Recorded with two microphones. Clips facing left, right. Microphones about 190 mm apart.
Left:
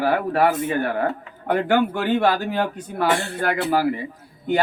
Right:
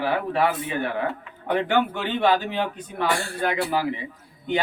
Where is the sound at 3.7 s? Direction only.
40° left (ahead or behind).